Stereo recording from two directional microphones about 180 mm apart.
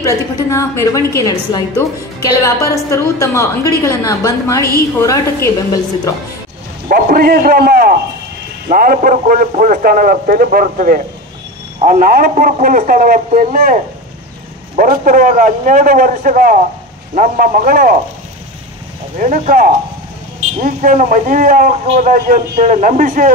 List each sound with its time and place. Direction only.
0.0 s a woman's voice: 15° left (ahead or behind)
6.9 s a man's voice: 55° right (ahead or behind)
19.1 s a man's voice: 40° right (ahead or behind)